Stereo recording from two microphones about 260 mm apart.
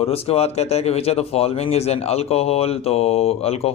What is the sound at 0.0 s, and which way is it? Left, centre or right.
Speech, left.